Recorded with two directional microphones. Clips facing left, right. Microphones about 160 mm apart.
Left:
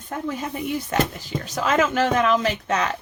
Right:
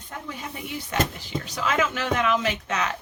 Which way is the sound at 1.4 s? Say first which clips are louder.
Left 5 dB; 45° left (ahead or behind).